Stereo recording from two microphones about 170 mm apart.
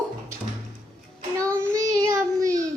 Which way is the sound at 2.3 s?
20° right (ahead or behind).